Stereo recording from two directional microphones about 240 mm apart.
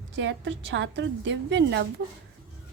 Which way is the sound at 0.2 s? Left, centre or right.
Right.